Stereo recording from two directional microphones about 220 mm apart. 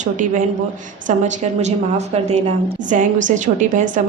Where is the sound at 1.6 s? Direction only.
30° right (ahead or behind).